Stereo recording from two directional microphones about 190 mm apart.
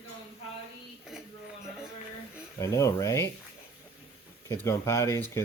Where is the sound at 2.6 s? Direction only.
15° left (ahead or behind).